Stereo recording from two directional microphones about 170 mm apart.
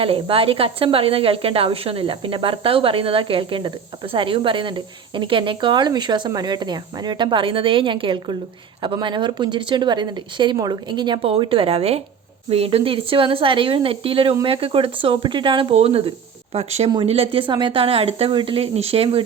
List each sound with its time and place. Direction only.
0.0 s a woman's voice: 35° right (ahead or behind)